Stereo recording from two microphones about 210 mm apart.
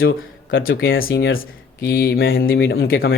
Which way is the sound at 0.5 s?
70° left (ahead or behind).